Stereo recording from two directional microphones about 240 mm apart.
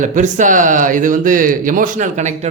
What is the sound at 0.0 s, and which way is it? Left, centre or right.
A man's voice, right.